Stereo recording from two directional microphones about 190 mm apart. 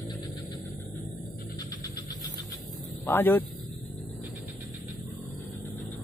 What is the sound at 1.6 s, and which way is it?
Vehicle, 20° left (ahead or behind).